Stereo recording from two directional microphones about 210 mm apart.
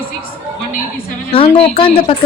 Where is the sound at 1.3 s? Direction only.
25° left (ahead or behind).